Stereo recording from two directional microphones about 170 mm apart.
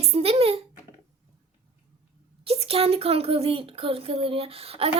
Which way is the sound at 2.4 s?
35° right (ahead or behind).